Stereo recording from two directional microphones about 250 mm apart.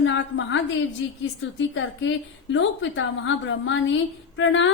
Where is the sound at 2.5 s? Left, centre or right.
Left.